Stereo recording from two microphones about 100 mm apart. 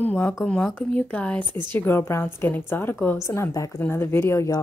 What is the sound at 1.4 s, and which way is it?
Speech, 55° right (ahead or behind).